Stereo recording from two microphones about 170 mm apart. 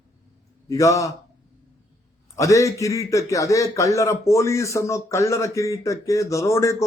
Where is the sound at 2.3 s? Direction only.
20° left (ahead or behind).